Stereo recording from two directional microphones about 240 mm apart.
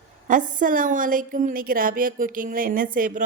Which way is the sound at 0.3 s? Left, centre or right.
Right.